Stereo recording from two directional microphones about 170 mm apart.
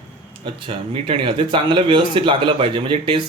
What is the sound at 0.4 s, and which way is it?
Speech, 30° right (ahead or behind).